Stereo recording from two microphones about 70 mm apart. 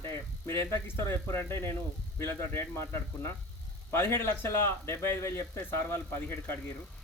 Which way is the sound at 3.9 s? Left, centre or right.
Left.